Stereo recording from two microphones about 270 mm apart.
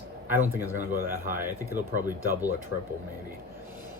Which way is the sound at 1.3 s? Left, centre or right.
Centre.